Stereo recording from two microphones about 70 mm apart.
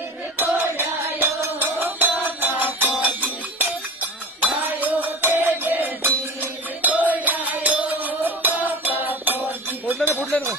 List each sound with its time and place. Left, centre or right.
0.3 s music: right